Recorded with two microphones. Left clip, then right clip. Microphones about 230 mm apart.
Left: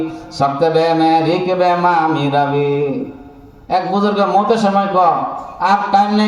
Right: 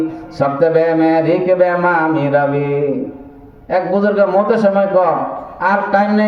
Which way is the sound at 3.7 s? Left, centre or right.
Left.